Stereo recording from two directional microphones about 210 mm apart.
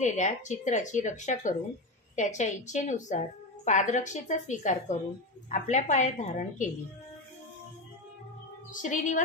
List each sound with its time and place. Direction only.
0.0 s a woman's voice: 35° left (ahead or behind)
8.7 s a woman's voice: 35° left (ahead or behind)